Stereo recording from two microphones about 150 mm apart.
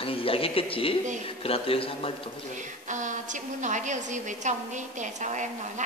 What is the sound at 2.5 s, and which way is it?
A woman's voice, 55° right (ahead or behind).